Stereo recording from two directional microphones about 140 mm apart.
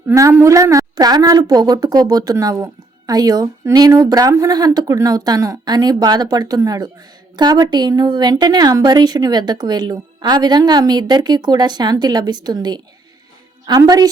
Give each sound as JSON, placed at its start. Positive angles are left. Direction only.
{"t": 0.1, "sound": "a woman's voice", "side_deg": -15}